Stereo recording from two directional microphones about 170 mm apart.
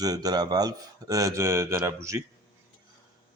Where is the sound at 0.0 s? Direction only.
20° right (ahead or behind).